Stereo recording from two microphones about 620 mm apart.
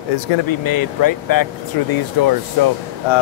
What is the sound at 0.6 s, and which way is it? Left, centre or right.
Speech, left.